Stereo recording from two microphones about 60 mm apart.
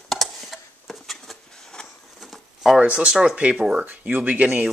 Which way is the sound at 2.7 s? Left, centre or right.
Centre.